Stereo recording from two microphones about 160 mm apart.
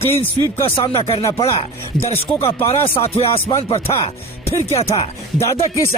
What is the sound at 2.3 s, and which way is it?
Speech, 40° left (ahead or behind).